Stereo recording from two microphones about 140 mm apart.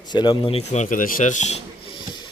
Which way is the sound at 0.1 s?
35° left (ahead or behind).